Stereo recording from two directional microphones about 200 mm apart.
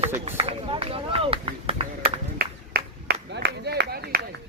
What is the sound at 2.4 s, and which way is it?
Clapping, 50° right (ahead or behind).